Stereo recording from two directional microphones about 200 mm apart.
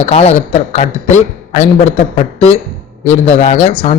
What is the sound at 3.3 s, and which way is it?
Speech, 35° left (ahead or behind).